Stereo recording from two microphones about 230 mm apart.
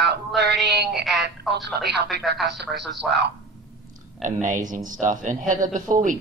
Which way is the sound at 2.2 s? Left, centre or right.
Centre.